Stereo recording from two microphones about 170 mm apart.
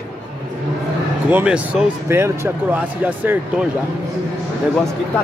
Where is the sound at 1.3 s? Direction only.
5° right (ahead or behind).